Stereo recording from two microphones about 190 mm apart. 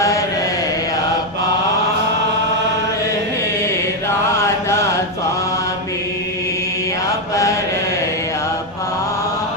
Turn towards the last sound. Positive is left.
turn(degrees=15)  # may be behind; listen again after turning